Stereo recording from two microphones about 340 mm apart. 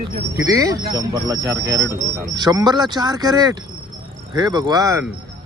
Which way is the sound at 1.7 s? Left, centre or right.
Centre.